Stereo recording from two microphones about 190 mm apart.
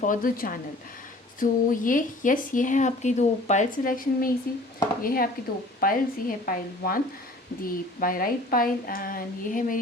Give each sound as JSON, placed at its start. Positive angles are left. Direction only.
{"t": 0.0, "sound": "speech", "side_deg": 45}